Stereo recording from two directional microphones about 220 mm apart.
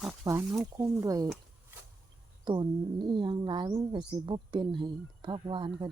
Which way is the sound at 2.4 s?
20° right (ahead or behind).